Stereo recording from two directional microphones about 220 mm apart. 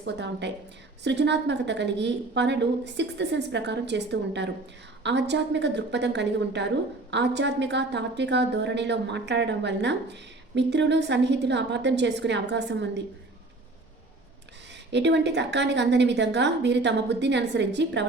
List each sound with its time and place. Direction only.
0.0 s a woman's voice: 50° right (ahead or behind)
14.9 s a woman's voice: 50° right (ahead or behind)